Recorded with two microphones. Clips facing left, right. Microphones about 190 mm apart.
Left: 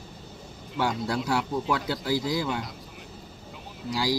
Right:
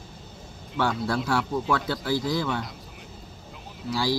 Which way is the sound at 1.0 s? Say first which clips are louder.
Right 1 dB; 15° left (ahead or behind).